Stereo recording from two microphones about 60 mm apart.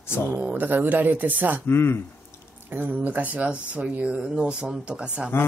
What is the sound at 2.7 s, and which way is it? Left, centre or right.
Speech, right.